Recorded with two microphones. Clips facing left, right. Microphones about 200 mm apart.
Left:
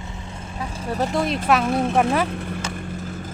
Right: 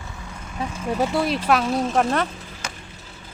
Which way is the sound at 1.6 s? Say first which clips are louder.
Left 1 dB; 55° left (ahead or behind).